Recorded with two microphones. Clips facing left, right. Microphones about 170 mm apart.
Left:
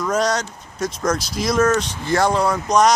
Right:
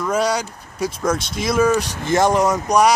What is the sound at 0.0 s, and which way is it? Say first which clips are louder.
Speech: even; 10° right (ahead or behind).